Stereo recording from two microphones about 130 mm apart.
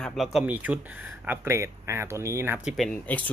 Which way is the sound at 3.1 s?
15° left (ahead or behind).